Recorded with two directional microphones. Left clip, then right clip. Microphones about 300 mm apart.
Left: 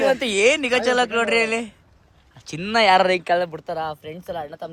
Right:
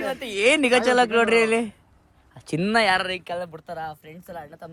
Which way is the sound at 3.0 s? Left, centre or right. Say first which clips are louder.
Left 10 dB; centre.